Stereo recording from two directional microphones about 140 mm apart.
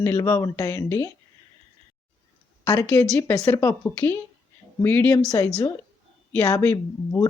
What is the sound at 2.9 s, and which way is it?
Speech, 20° left (ahead or behind).